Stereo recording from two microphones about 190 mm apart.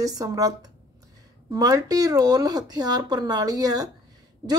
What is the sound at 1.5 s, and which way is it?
Speech, 20° right (ahead or behind).